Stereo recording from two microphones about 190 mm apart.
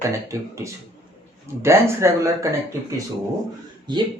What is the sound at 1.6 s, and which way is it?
Speech, 15° right (ahead or behind).